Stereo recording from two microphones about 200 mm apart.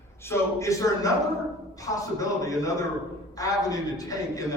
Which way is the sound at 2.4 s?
15° left (ahead or behind).